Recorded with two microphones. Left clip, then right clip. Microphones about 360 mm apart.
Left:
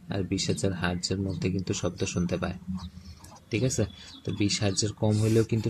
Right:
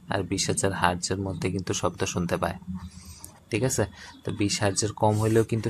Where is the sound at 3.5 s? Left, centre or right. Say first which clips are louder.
Right 3 dB; centre.